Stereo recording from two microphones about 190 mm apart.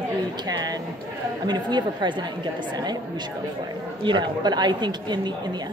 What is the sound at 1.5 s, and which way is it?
Speech, 20° right (ahead or behind).